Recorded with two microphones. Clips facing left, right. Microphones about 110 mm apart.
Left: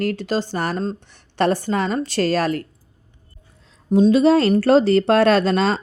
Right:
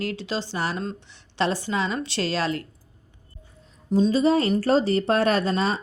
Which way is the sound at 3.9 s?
55° left (ahead or behind).